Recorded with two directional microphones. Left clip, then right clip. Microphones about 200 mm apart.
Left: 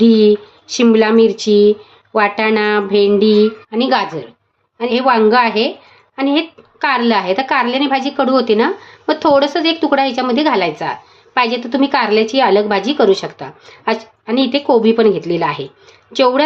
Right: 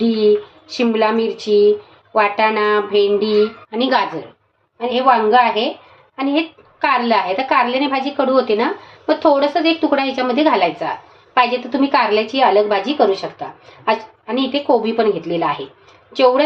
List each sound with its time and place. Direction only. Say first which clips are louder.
0.0 s a woman's voice: left 4 dB; 40° left (ahead or behind)
3.7 s a woman's voice: left 2 dB; 30° left (ahead or behind)
5.0 s a woman's voice: left 1 dB; 40° left (ahead or behind)